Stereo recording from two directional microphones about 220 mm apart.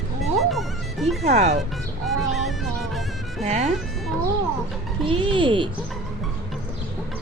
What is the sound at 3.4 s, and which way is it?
Speech, 30° right (ahead or behind).